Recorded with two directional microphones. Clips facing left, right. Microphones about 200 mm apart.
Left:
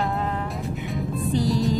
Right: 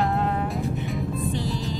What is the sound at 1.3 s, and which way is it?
Music, 40° left (ahead or behind).